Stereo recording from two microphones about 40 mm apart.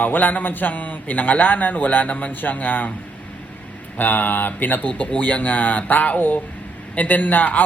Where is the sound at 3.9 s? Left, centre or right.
Left.